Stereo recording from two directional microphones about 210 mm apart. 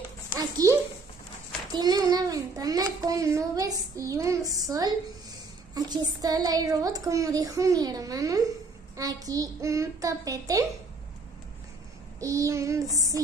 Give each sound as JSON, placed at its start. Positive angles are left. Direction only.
{"t": 0.4, "sound": "a child's voice", "side_deg": -15}
{"t": 1.7, "sound": "a sound", "side_deg": -20}
{"t": 5.8, "sound": "speech", "side_deg": -20}
{"t": 12.2, "sound": "speech", "side_deg": -15}